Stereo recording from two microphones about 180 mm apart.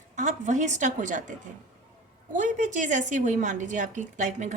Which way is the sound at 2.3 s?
45° right (ahead or behind).